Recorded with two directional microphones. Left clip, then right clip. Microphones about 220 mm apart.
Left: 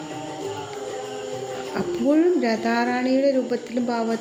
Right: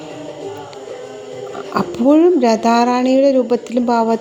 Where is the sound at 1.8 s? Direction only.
30° right (ahead or behind).